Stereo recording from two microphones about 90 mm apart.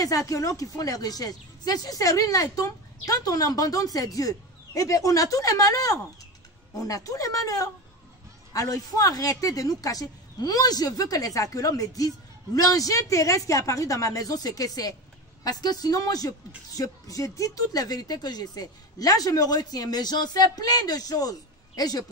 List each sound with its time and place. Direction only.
0.0 s speech: 40° left (ahead or behind)